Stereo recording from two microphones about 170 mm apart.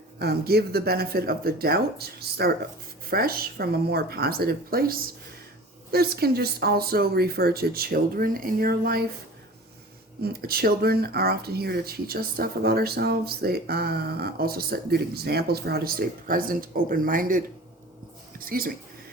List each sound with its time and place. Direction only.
0.2 s speech: 70° right (ahead or behind)
10.4 s speech: 65° right (ahead or behind)